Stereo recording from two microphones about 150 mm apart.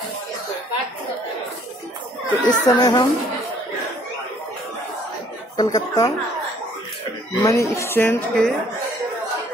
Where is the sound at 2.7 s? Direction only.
25° left (ahead or behind).